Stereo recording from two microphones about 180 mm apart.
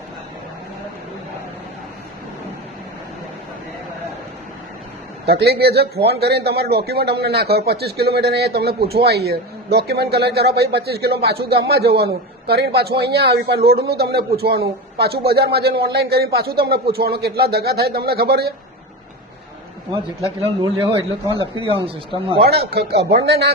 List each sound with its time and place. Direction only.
5.2 s a man's voice: 60° right (ahead or behind)
19.9 s a man's voice: 30° right (ahead or behind)
22.7 s a man's voice: 65° right (ahead or behind)